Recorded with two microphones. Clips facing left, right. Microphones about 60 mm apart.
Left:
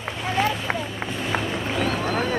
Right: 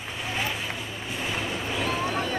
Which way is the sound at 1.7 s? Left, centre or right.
Left.